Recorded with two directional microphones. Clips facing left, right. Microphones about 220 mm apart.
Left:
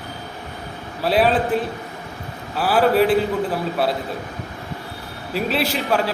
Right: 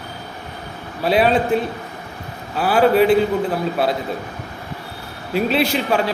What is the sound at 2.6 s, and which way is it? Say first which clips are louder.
Speech: right 2 dB; 5° left (ahead or behind).